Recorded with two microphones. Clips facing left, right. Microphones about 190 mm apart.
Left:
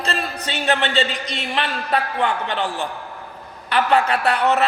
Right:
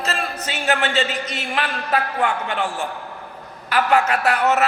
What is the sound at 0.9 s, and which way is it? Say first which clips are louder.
Speech: even; 35° left (ahead or behind).